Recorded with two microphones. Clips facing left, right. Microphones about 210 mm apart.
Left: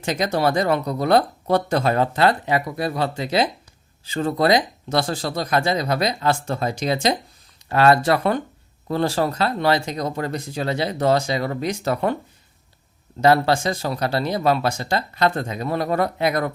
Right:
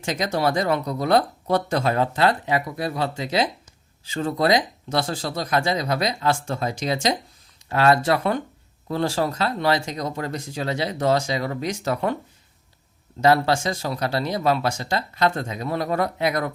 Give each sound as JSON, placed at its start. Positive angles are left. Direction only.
{"t": 0.0, "sound": "speech", "side_deg": 55}
{"t": 13.2, "sound": "speech", "side_deg": 55}